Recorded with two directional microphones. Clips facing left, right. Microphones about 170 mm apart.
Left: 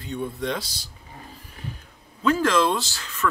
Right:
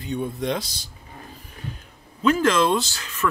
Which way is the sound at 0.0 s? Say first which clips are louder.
Right 2 dB; 15° right (ahead or behind).